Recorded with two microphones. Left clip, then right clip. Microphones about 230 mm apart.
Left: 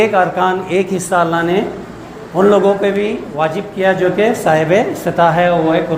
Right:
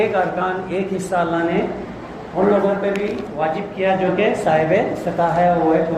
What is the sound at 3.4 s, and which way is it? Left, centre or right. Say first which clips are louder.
Speech: left 4 dB; left.